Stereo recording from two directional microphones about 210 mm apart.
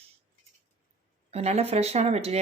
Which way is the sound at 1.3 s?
30° right (ahead or behind).